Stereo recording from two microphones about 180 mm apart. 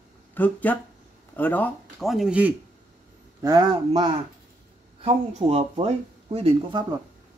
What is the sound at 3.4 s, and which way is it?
Speech, 20° right (ahead or behind).